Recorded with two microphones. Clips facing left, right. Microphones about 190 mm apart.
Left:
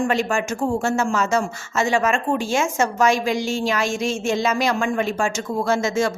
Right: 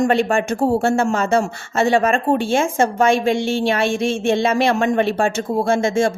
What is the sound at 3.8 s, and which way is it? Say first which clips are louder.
Speech: right 4 dB; 55° right (ahead or behind).